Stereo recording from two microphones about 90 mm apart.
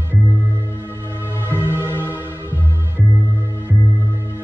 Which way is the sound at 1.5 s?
25° right (ahead or behind).